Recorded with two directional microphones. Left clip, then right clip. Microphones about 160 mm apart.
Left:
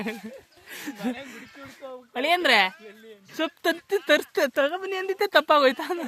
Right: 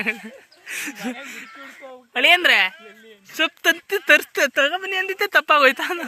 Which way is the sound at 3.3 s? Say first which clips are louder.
Right 7 dB; 30° left (ahead or behind).